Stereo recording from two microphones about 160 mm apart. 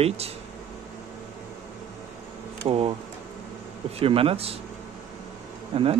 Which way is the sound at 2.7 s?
35° right (ahead or behind).